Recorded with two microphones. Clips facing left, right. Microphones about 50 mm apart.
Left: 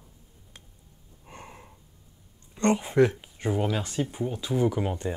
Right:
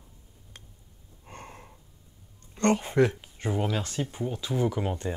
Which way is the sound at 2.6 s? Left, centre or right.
Centre.